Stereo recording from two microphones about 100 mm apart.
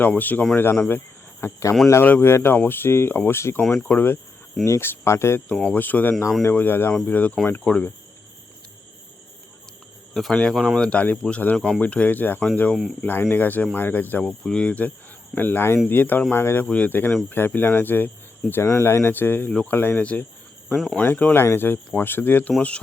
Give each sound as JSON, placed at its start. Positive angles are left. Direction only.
{"t": 0.0, "sound": "speech", "side_deg": 15}
{"t": 3.6, "sound": "speech", "side_deg": 5}
{"t": 3.8, "sound": "speech", "side_deg": 20}
{"t": 5.5, "sound": "speech", "side_deg": 5}
{"t": 5.7, "sound": "speech", "side_deg": 20}
{"t": 6.1, "sound": "speech", "side_deg": 0}
{"t": 6.5, "sound": "speech", "side_deg": 20}
{"t": 10.2, "sound": "speech", "side_deg": 0}
{"t": 10.8, "sound": "speech", "side_deg": 10}
{"t": 12.7, "sound": "speech", "side_deg": 0}
{"t": 13.0, "sound": "speech", "side_deg": 20}
{"t": 20.7, "sound": "speech", "side_deg": 0}
{"t": 21.0, "sound": "speech", "side_deg": 15}